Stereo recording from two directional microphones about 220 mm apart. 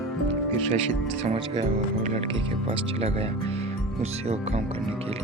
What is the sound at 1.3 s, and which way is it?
Speech, 25° right (ahead or behind).